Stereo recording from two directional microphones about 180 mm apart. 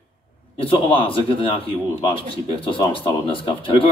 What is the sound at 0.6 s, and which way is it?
A man's voice, 30° left (ahead or behind).